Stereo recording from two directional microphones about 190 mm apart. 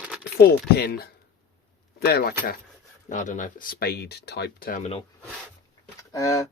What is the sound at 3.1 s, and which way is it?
Speech, 40° left (ahead or behind).